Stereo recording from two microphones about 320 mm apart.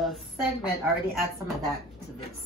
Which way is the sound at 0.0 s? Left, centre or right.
Centre.